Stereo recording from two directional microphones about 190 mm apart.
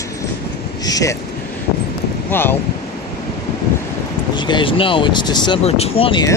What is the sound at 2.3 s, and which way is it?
Speech, 10° left (ahead or behind).